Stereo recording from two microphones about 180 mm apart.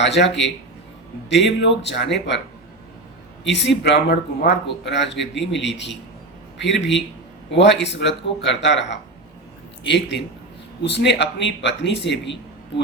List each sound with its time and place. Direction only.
0.0 s a man's voice: 75° left (ahead or behind)
0.3 s a man's voice: centre (ahead or behind)
1.3 s a man's voice: 80° left
3.4 s a man's voice: 80° left
4.8 s a man's voice: 75° left (ahead or behind)